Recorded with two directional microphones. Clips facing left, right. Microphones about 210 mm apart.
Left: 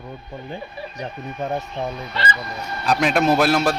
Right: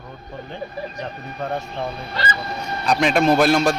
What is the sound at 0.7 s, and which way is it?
Speech, 40° right (ahead or behind).